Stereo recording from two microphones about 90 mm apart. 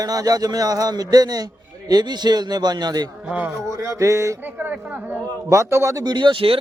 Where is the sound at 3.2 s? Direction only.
15° right (ahead or behind).